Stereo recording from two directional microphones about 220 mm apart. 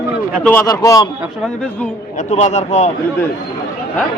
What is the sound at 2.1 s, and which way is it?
Speech, 30° left (ahead or behind).